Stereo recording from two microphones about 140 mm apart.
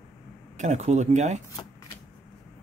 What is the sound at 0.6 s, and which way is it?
Speech, 55° right (ahead or behind).